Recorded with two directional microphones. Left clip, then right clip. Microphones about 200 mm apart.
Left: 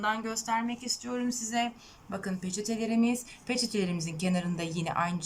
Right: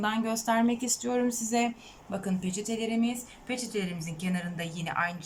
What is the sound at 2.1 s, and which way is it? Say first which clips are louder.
Speech: right 2 dB; 10° right (ahead or behind).